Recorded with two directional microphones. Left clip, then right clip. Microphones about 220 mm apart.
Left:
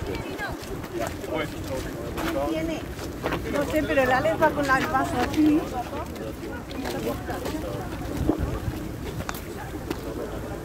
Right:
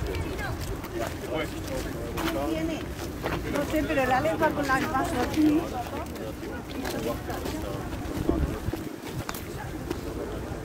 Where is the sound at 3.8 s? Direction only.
25° left (ahead or behind).